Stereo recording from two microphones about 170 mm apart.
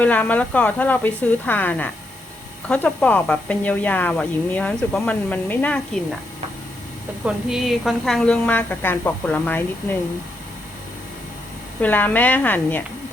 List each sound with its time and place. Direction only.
0.0 s speech: 10° left (ahead or behind)
7.3 s speech: centre (ahead or behind)
11.8 s speech: 10° left (ahead or behind)